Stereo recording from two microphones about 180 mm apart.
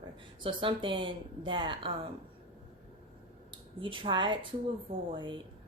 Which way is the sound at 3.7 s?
30° right (ahead or behind).